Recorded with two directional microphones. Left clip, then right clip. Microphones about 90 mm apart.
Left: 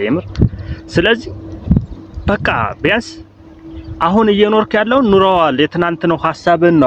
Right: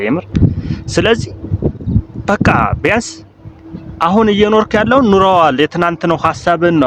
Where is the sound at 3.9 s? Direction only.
20° right (ahead or behind); by 6.3 s 40° right (ahead or behind).